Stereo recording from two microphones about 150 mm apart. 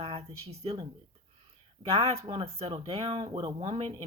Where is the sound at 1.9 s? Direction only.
40° right (ahead or behind).